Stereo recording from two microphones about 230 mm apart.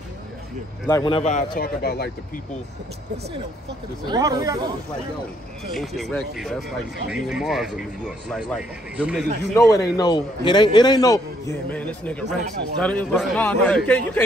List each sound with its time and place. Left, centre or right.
0.8 s speech: centre; by 2.4 s left
4.0 s speech: centre
5.7 s a man's voice: centre
9.6 s a man's voice: centre